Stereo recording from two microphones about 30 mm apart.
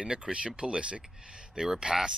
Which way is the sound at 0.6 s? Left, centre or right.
Right.